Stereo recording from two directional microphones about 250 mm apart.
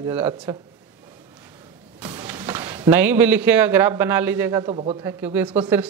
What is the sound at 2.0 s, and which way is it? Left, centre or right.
Speech, centre.